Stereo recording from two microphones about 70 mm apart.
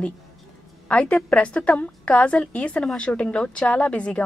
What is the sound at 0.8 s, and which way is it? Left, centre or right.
A woman's voice, left.